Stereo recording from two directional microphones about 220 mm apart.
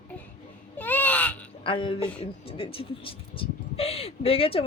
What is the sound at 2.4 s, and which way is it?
Speech, 25° left (ahead or behind).